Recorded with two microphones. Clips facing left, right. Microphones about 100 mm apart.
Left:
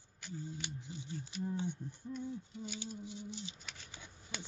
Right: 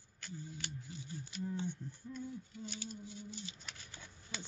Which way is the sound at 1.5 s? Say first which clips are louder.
Left 2 dB; 15° left (ahead or behind).